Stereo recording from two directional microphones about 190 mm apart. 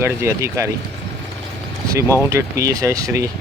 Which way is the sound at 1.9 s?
15° right (ahead or behind).